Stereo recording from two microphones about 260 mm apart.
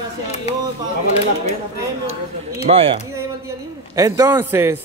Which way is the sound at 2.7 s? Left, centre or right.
Right.